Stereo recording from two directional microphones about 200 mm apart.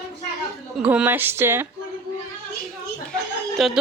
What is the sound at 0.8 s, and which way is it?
Speech, 5° right (ahead or behind).